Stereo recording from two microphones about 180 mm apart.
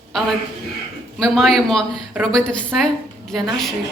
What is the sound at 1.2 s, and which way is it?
A woman's voice, centre (ahead or behind).